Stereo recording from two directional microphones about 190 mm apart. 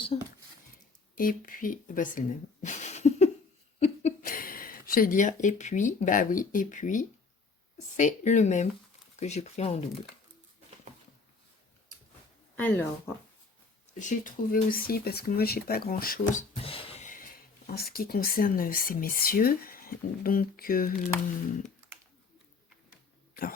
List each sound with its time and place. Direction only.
0.1 s speech: 30° left (ahead or behind)
1.1 s speech: 50° left (ahead or behind)
3.8 s a sound: 35° left (ahead or behind)
4.2 s speech: 50° left (ahead or behind); by 9.8 s 35° left (ahead or behind)
12.5 s speech: 10° left (ahead or behind)
13.9 s speech: 40° left (ahead or behind)
17.7 s speech: 55° left (ahead or behind)